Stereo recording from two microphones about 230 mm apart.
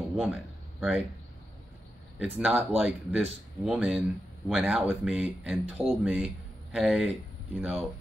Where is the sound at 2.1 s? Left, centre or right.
Centre.